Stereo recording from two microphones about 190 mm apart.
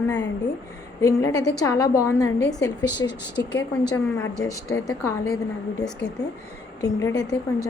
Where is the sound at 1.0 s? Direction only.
20° left (ahead or behind).